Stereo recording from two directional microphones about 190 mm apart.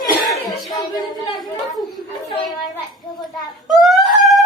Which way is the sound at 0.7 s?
20° left (ahead or behind).